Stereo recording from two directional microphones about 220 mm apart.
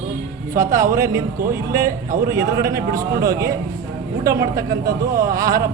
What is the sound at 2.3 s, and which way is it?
A man's voice, 15° right (ahead or behind).